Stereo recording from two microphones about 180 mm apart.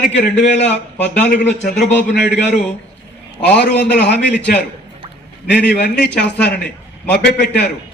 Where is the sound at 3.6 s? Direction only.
70° left (ahead or behind).